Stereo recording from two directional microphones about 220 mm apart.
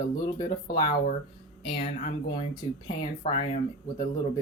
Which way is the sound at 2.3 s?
20° left (ahead or behind).